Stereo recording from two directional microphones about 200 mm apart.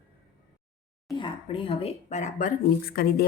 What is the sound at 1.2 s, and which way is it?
Speech, 25° left (ahead or behind).